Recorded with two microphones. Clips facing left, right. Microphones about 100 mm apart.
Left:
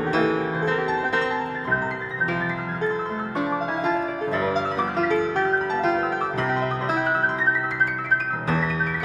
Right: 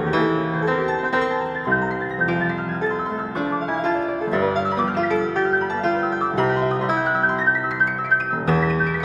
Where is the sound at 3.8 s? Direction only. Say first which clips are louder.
Right 2 dB; 10° left (ahead or behind).